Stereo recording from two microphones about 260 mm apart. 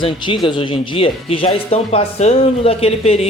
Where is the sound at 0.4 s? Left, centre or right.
Centre.